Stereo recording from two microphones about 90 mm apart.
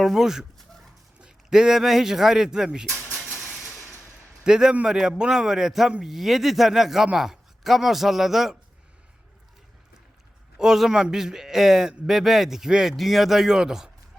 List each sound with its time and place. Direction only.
0.0 s speech: centre (ahead or behind)
3.6 s a sound: 30° left (ahead or behind)
4.4 s a man's voice: 5° right (ahead or behind)
10.6 s speech: 5° right (ahead or behind)